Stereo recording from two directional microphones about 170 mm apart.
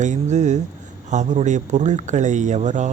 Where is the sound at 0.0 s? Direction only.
45° right (ahead or behind).